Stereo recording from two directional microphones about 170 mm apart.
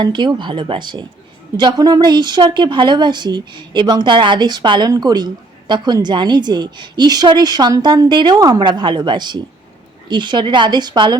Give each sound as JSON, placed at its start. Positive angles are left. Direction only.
{"t": 0.0, "sound": "a woman's voice", "side_deg": -25}